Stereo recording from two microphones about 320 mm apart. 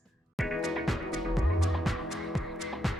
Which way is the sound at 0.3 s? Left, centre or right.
Centre.